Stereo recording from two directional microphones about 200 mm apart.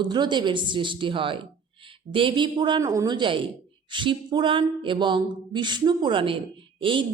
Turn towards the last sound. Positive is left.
turn(degrees=-25)  # may be behind; listen again after turning